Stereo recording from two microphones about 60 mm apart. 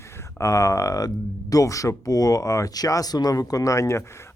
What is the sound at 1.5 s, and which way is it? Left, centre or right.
Speech, left.